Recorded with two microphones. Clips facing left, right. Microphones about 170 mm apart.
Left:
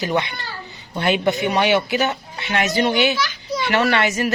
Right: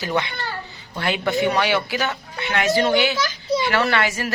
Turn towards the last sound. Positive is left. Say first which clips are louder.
# left 3 dB
turn(degrees=20)  # may be behind; listen again after turning